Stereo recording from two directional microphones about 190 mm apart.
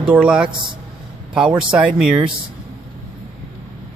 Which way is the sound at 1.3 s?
5° right (ahead or behind).